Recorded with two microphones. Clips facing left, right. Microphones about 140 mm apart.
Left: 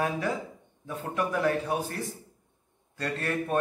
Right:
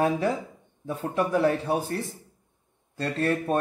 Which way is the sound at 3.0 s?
30° right (ahead or behind).